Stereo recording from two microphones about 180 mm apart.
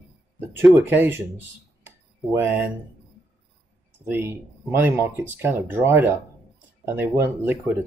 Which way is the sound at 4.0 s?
15° right (ahead or behind).